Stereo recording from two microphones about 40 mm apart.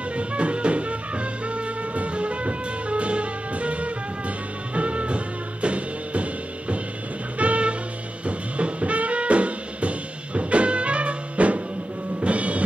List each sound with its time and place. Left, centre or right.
0.1 s music: right
7.3 s music: right
8.3 s brass instrument: right
12.2 s music: right